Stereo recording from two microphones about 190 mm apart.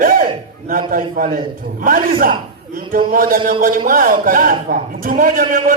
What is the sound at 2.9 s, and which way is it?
A man's voice, 50° right (ahead or behind).